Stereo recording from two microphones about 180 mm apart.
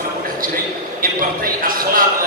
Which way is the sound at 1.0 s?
50° right (ahead or behind).